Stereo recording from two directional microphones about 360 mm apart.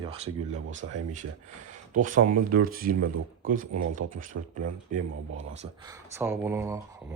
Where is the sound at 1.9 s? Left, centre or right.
Right.